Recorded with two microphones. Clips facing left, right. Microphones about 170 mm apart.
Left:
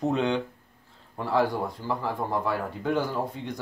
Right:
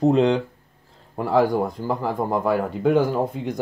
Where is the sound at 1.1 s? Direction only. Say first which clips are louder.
Right 6 dB; 45° right (ahead or behind).